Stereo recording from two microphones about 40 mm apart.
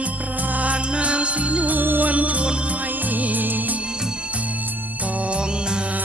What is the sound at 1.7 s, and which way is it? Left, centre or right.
Music, right.